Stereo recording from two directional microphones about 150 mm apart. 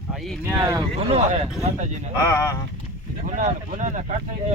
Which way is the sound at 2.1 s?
20° left (ahead or behind).